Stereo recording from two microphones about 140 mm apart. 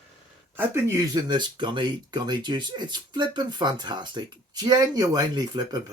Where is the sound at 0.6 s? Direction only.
20° right (ahead or behind).